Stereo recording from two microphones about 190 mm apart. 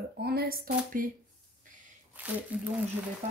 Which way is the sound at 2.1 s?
10° right (ahead or behind).